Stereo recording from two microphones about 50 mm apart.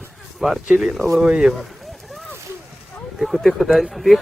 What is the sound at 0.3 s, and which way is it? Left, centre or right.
Speech, centre.